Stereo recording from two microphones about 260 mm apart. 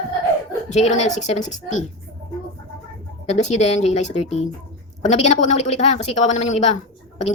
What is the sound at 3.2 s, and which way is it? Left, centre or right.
Speech, left.